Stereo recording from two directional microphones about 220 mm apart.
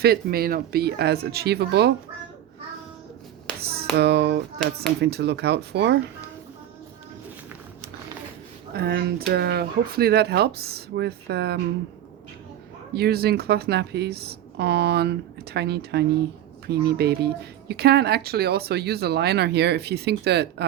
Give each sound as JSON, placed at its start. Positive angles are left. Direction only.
{"t": 0.0, "sound": "speech", "side_deg": -45}
{"t": 3.6, "sound": "finger snapping", "side_deg": -45}
{"t": 3.9, "sound": "speech", "side_deg": -50}
{"t": 8.7, "sound": "speech", "side_deg": -45}
{"t": 12.9, "sound": "speech", "side_deg": -45}